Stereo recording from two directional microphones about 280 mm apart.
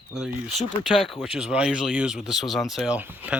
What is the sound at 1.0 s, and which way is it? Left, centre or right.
Speech, centre.